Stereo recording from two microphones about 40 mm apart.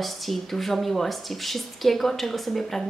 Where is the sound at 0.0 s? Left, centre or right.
Centre.